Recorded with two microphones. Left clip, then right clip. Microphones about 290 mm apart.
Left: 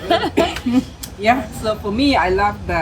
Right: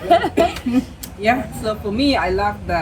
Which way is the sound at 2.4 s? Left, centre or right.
Centre.